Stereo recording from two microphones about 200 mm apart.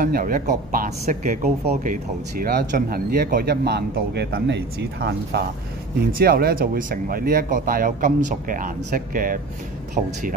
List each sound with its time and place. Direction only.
0.0 s speech: 45° right (ahead or behind)